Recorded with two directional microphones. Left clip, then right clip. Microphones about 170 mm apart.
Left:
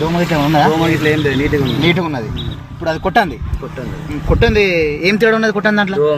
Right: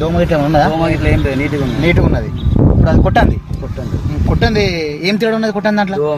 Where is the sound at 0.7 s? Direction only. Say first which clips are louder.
Left 1 dB; 30° right (ahead or behind).